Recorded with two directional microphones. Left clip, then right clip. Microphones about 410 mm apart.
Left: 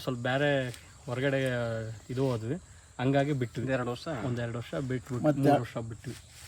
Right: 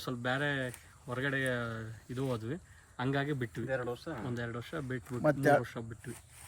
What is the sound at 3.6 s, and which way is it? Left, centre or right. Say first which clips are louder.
Speech: left 4 dB; left.